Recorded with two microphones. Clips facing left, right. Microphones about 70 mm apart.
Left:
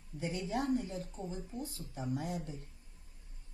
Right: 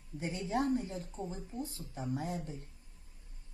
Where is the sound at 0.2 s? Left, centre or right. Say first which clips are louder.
Right 2 dB; right.